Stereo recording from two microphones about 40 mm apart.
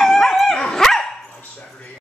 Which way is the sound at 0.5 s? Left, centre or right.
Centre.